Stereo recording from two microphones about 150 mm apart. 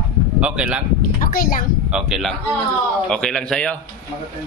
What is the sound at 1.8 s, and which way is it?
A man's voice, 5° right (ahead or behind).